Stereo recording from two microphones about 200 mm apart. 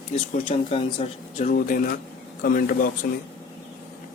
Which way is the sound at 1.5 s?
45° left (ahead or behind).